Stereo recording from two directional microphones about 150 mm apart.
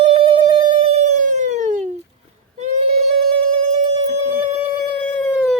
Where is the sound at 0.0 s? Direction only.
40° right (ahead or behind); by 1.9 s 55° right (ahead or behind).